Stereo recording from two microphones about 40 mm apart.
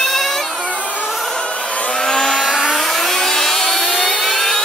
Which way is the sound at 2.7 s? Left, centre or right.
Centre.